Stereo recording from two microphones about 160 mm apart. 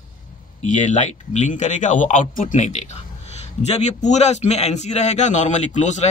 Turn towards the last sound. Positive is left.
turn(degrees=50)  # may be behind; listen again after turning